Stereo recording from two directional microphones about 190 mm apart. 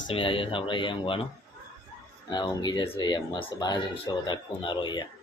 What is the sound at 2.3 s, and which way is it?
Speech, 25° left (ahead or behind).